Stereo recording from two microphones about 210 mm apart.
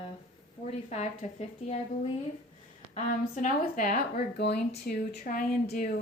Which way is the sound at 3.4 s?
40° left (ahead or behind).